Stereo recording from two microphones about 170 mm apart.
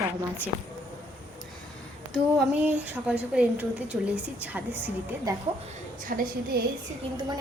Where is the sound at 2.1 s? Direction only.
5° right (ahead or behind).